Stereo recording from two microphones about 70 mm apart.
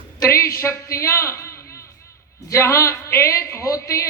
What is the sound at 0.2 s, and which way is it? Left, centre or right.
A man's voice, left.